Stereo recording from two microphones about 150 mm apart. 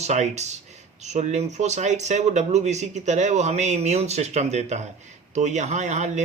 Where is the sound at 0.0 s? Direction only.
50° right (ahead or behind).